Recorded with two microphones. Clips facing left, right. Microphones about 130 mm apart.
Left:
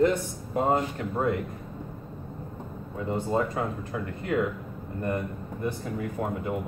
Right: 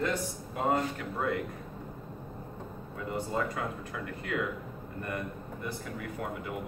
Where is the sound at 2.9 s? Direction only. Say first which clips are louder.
Left 6 dB; 30° left (ahead or behind).